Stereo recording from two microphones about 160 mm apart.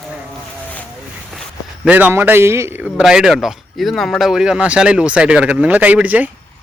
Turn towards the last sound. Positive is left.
turn(degrees=-10)  # may be behind; listen again after turning